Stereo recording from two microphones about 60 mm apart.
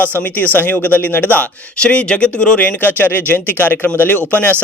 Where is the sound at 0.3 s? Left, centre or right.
Left.